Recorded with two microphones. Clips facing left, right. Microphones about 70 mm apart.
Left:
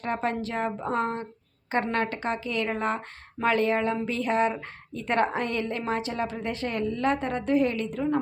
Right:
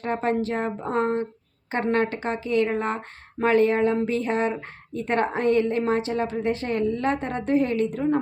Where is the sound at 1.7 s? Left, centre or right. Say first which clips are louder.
Right 3 dB; right.